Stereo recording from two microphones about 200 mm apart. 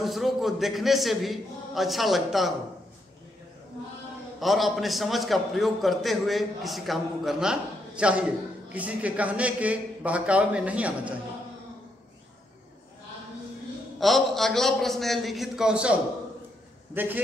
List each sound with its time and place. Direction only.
0.0 s a man's voice: centre (ahead or behind)
4.4 s a man's voice: centre (ahead or behind)
13.9 s a man's voice: centre (ahead or behind)